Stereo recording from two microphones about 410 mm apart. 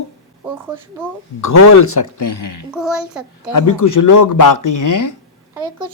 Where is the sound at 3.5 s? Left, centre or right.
Left.